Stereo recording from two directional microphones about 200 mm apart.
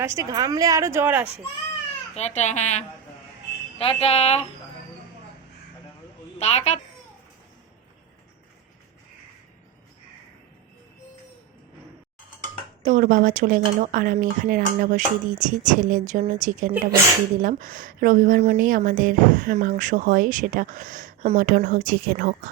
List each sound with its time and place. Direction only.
0.0 s a woman's voice: 15° right (ahead or behind)
2.1 s speech: 35° left (ahead or behind)
6.4 s speech: 30° left (ahead or behind)
12.8 s speech: 40° right (ahead or behind)